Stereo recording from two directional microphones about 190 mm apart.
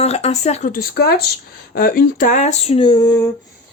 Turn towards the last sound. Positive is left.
turn(degrees=20)  # may be behind; listen again after turning